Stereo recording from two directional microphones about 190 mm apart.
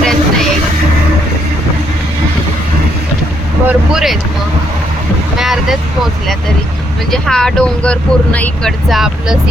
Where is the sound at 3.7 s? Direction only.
5° right (ahead or behind).